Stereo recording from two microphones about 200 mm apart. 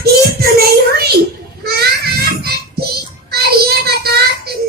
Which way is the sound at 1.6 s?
50° right (ahead or behind).